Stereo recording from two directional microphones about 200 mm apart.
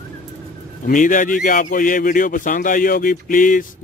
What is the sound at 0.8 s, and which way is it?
A man's voice, 40° left (ahead or behind).